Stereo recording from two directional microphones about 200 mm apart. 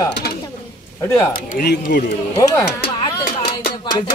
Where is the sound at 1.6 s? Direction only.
50° left (ahead or behind).